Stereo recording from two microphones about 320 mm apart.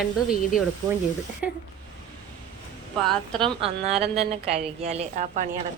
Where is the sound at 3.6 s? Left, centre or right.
Centre.